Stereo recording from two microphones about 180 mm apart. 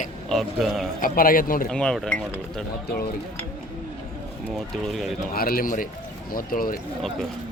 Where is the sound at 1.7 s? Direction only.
5° left (ahead or behind).